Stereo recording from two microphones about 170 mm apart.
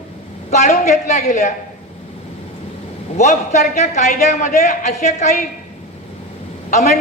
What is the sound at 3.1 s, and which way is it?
A man's voice, 40° left (ahead or behind).